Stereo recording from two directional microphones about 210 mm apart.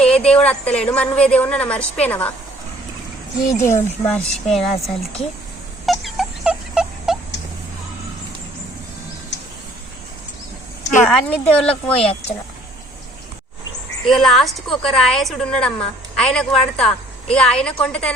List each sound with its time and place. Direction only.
0.0 s a woman's voice: 5° left (ahead or behind)
3.5 s a woman's voice: 10° left (ahead or behind)
5.8 s a sound: centre (ahead or behind)
11.0 s a woman's voice: 5° left (ahead or behind)
14.1 s a woman's voice: centre (ahead or behind)